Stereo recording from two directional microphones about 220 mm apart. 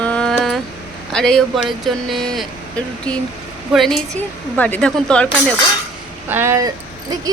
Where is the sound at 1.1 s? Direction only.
5° left (ahead or behind).